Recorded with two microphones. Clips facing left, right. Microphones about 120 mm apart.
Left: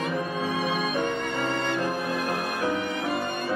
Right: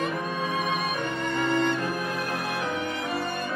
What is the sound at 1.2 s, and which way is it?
Music, 40° left (ahead or behind).